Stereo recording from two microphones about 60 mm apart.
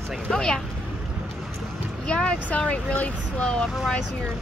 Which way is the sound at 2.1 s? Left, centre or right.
Centre.